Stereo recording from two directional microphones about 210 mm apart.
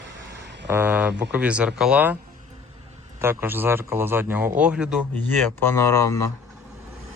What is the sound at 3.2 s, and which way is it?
Speech, 10° right (ahead or behind).